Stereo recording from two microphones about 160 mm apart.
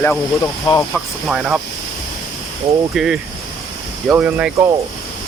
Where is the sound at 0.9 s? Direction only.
Centre (ahead or behind).